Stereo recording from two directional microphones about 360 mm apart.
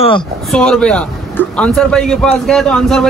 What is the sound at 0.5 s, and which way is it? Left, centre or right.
A man's voice, centre.